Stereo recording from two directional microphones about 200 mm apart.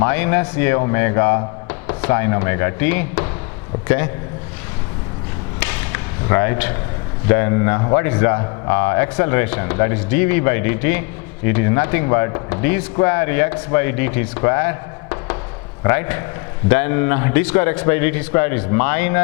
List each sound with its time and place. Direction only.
0.0 s speech: 15° left (ahead or behind)
5.5 s a sound: 10° left (ahead or behind)
7.3 s speech: 15° left (ahead or behind)